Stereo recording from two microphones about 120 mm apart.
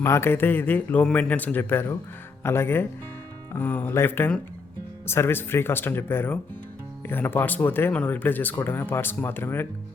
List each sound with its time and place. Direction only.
0.0 s speech: 20° left (ahead or behind)